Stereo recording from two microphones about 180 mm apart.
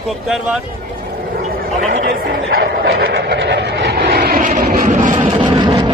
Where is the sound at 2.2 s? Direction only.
65° right (ahead or behind); by 5.4 s 45° right (ahead or behind).